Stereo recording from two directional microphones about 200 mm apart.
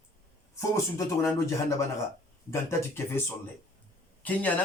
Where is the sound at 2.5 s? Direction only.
10° left (ahead or behind).